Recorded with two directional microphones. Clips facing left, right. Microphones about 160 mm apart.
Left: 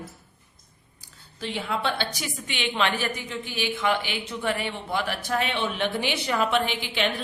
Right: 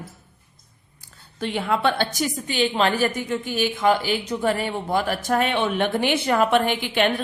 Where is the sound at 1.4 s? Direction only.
60° right (ahead or behind).